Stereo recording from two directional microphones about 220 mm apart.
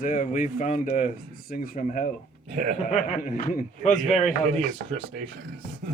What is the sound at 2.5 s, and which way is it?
Speech, 30° right (ahead or behind).